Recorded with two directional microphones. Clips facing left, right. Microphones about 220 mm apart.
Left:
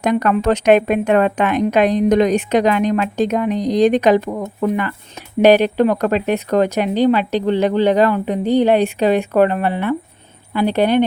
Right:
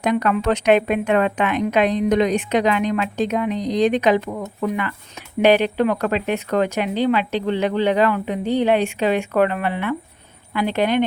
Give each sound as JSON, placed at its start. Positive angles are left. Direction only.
{"t": 0.0, "sound": "speech", "side_deg": 45}